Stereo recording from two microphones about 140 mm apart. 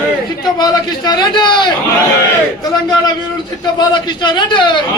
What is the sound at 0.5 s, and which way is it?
A man's voice, 30° left (ahead or behind).